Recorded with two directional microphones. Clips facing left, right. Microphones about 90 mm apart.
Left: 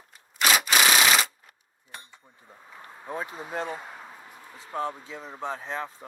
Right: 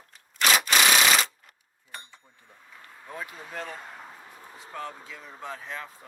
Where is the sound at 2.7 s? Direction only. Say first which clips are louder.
Left 6 dB; 25° left (ahead or behind).